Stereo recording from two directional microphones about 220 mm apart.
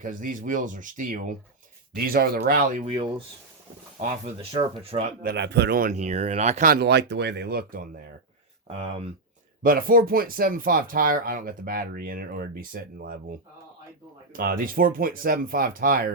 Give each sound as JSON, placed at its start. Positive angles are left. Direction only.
{"t": 0.0, "sound": "speech", "side_deg": -35}
{"t": 2.8, "sound": "speech", "side_deg": -25}
{"t": 5.2, "sound": "speech", "side_deg": -50}
{"t": 8.6, "sound": "speech", "side_deg": -25}
{"t": 9.6, "sound": "speech", "side_deg": -40}
{"t": 14.3, "sound": "speech", "side_deg": -40}